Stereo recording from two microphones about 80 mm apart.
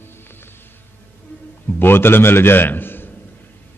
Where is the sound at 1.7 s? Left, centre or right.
Left.